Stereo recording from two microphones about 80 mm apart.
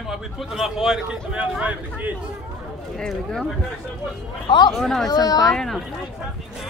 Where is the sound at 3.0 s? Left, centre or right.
Centre.